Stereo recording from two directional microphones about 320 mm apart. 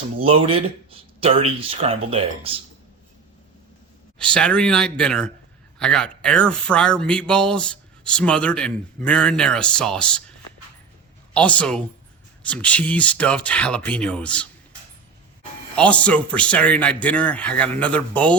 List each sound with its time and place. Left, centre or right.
0.2 s speech: centre
4.2 s speech: centre
11.3 s speech: centre
15.7 s speech: centre